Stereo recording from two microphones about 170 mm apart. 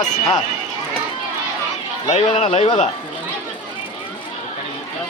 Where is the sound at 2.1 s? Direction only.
40° left (ahead or behind).